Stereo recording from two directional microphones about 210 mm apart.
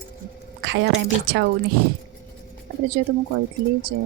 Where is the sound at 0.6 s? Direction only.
55° right (ahead or behind).